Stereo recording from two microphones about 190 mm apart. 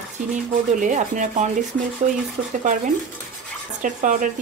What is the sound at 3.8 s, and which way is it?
Speech, 45° right (ahead or behind).